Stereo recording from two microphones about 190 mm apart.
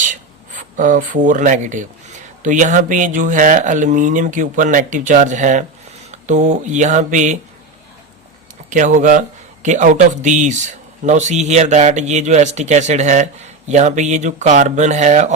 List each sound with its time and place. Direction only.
0.0 s writing: 45° right (ahead or behind)
2.4 s a man's voice: 40° right (ahead or behind)
8.7 s a man's voice: 40° right (ahead or behind)